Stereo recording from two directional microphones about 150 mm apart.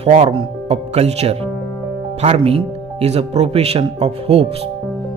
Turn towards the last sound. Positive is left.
turn(degrees=-40)  # may be behind; listen again after turning